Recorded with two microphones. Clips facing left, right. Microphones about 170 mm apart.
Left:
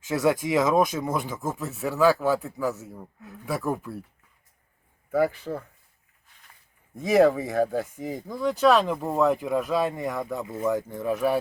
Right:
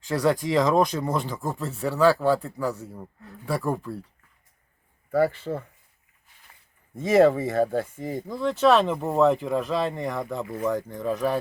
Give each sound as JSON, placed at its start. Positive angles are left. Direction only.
{"t": 0.1, "sound": "speech", "side_deg": 5}
{"t": 5.1, "sound": "speech", "side_deg": 0}
{"t": 6.9, "sound": "speech", "side_deg": 0}